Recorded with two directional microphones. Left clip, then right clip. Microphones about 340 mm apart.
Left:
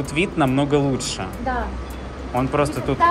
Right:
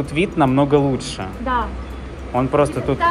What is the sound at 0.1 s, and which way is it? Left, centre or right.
Speech, centre.